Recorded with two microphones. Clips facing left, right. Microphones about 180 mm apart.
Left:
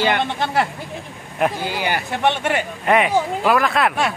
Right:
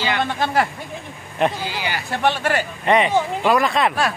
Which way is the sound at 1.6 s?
55° left (ahead or behind).